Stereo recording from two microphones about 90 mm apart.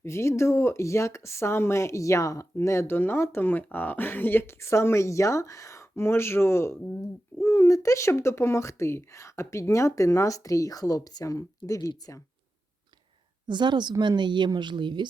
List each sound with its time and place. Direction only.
0.0 s speech: 30° left (ahead or behind)
13.5 s speech: 55° right (ahead or behind)